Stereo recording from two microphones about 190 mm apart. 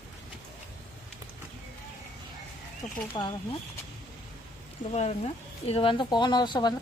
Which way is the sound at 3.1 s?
25° left (ahead or behind).